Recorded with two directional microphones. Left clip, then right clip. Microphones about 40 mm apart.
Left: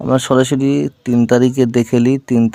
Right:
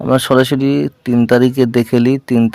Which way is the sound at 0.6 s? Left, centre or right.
Right.